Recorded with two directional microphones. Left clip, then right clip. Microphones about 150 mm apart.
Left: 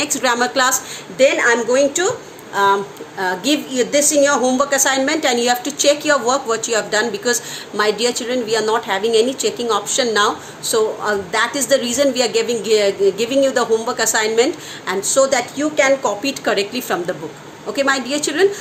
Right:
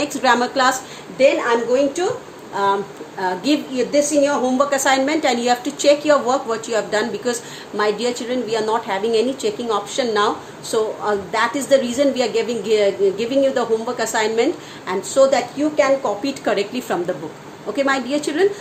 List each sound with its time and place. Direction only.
0.0 s a woman's voice: 10° right (ahead or behind)
16.2 s a woman's voice: 15° right (ahead or behind)